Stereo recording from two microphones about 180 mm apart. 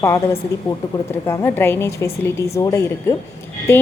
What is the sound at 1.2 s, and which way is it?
A woman's voice, 10° left (ahead or behind).